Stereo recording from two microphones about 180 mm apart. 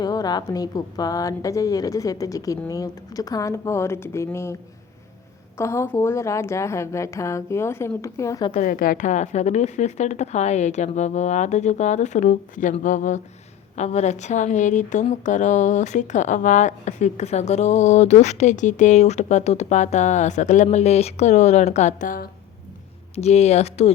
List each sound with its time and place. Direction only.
0.0 s a woman's voice: 20° left (ahead or behind)
5.5 s a woman's voice: 15° left (ahead or behind)
8.6 s speech: 50° left (ahead or behind)
23.1 s speech: 35° left (ahead or behind)